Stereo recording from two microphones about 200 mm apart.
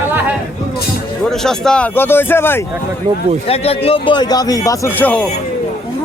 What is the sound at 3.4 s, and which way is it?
Speech, 30° left (ahead or behind).